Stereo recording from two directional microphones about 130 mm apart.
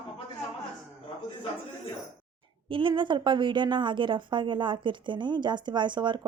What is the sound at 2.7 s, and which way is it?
A woman's voice, 40° right (ahead or behind).